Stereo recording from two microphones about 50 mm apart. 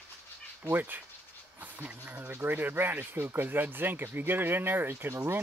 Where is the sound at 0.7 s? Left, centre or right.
Right.